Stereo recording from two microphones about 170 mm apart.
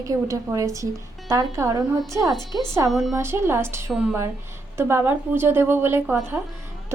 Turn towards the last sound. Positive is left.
turn(degrees=-15)  # may be behind; listen again after turning